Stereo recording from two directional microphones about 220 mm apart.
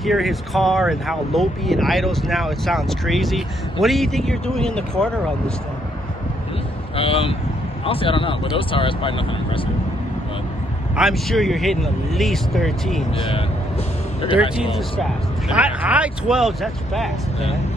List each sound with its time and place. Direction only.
0.0 s speech: centre (ahead or behind)
7.0 s speech: 25° left (ahead or behind)
11.0 s speech: centre (ahead or behind)
14.5 s speech: centre (ahead or behind)